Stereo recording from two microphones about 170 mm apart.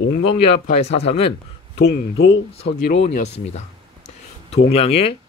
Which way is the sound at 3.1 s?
40° left (ahead or behind).